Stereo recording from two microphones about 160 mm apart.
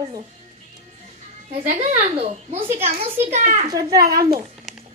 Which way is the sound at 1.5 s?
45° right (ahead or behind).